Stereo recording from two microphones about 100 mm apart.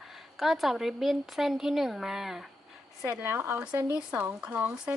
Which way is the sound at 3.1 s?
20° right (ahead or behind).